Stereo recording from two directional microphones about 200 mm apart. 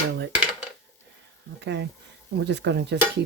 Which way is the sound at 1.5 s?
60° right (ahead or behind).